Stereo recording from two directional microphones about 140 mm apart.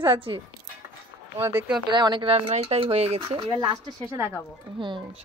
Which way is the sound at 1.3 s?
15° right (ahead or behind).